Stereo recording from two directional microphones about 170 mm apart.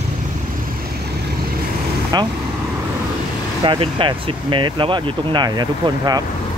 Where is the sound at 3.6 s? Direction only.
30° right (ahead or behind).